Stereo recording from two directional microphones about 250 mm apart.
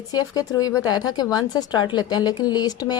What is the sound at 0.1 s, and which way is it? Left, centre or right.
A woman's voice, centre.